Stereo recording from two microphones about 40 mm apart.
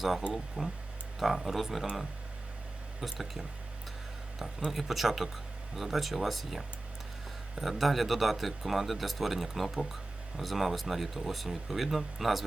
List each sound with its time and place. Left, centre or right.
0.0 s speech: centre
3.0 s speech: centre
4.7 s speech: centre